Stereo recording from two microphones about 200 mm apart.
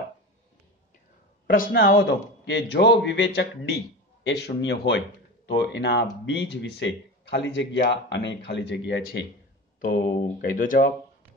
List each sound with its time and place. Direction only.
1.7 s speech: 50° left (ahead or behind)
9.8 s speech: 45° left (ahead or behind)